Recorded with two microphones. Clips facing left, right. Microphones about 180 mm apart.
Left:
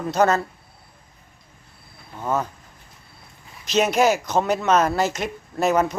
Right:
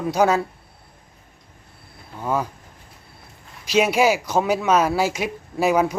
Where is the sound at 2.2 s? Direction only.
10° right (ahead or behind).